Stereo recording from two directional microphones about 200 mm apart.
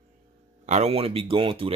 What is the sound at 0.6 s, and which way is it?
Speech, 35° right (ahead or behind).